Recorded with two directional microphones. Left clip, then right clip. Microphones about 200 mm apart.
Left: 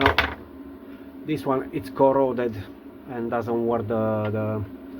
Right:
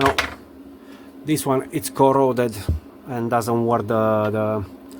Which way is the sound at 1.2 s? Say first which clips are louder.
Right 4 dB; 45° right (ahead or behind).